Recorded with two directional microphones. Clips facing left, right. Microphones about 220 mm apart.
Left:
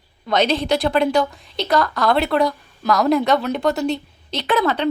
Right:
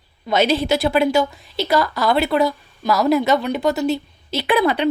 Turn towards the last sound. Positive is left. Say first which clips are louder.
# right 2 dB
turn(degrees=-15)  # may be behind; listen again after turning